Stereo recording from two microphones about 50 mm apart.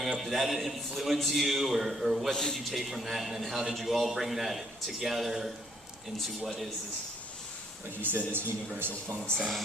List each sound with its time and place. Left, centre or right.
0.2 s a man's voice: centre
2.3 s a man's voice: centre
2.6 s a man's voice: centre
8.0 s a man's voice: right
9.4 s a man's voice: centre